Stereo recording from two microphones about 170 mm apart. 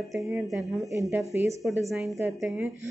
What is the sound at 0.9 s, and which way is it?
Speech, 15° right (ahead or behind).